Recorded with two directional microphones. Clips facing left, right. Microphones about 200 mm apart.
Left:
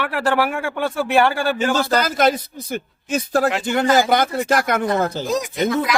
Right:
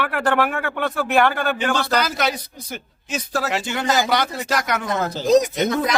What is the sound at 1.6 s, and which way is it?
Speech, 45° left (ahead or behind).